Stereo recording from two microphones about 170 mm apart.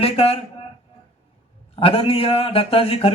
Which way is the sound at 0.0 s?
35° left (ahead or behind).